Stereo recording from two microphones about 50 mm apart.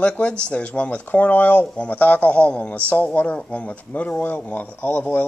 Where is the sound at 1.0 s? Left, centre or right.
Left.